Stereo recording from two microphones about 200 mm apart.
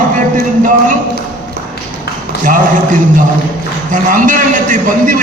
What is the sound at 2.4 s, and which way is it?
A man's voice, 40° right (ahead or behind).